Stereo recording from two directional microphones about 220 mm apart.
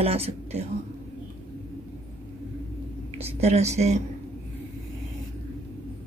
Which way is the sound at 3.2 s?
30° right (ahead or behind).